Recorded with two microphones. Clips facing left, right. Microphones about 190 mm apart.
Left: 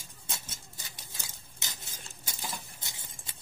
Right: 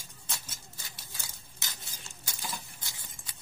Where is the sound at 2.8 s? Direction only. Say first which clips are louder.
Left 1 dB; 20° left (ahead or behind).